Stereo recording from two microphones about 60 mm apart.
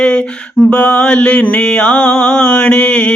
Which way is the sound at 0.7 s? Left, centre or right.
Centre.